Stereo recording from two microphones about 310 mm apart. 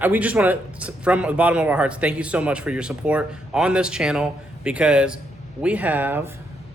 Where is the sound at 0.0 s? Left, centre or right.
Centre.